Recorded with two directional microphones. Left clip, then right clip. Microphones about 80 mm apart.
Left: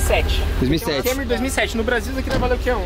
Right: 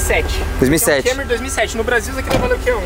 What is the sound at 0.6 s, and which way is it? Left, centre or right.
Speech, right.